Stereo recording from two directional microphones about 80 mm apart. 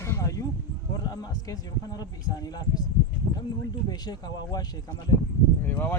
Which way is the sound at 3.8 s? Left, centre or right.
Left.